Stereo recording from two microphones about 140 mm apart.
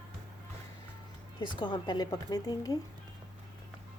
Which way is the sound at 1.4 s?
30° left (ahead or behind).